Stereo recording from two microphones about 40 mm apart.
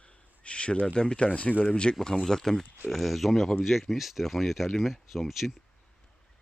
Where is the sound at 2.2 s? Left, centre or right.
Centre.